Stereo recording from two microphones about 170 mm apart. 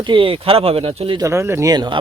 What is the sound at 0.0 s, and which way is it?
Speech, 30° right (ahead or behind).